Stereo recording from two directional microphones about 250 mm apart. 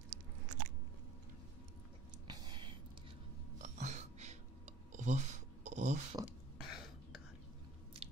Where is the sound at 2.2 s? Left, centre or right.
Centre.